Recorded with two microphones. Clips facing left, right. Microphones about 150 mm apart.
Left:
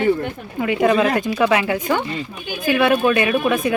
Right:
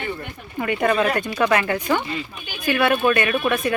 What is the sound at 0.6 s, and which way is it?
A woman's voice, 5° left (ahead or behind).